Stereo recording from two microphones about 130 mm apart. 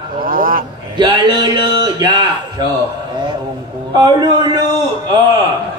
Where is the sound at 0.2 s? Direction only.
90° right.